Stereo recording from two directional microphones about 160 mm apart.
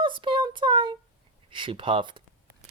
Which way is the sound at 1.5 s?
30° right (ahead or behind).